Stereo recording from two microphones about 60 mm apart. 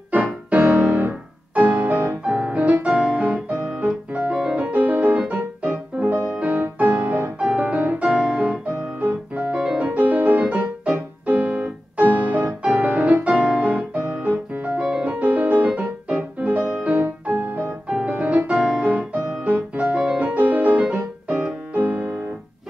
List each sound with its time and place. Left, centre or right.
0.1 s music: right
4.4 s piano: centre
5.3 s music: right
13.4 s piano: right
14.9 s music: centre
17.8 s music: centre
18.5 s music: centre
19.2 s music: centre
19.5 s music: right